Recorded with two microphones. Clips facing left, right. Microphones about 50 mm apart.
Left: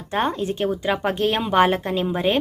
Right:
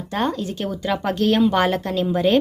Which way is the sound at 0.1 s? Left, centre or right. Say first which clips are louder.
Left 1 dB; left.